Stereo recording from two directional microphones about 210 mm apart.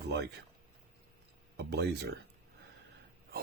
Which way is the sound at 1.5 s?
55° right (ahead or behind).